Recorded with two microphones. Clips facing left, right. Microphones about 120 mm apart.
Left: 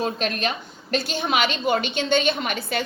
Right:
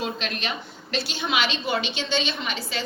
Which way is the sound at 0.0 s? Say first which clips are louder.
Left 5 dB; 45° left (ahead or behind).